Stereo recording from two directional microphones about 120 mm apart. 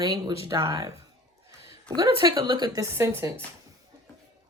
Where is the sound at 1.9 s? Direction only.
30° right (ahead or behind).